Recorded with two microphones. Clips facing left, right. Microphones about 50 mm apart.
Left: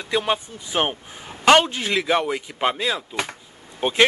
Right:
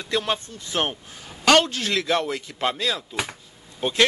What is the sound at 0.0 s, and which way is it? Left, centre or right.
Speech, centre.